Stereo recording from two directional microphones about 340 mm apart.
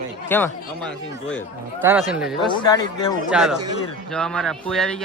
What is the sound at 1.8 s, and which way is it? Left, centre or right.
Speech, centre.